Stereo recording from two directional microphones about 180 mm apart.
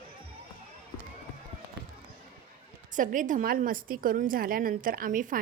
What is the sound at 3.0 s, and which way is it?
A woman's voice, 45° right (ahead or behind).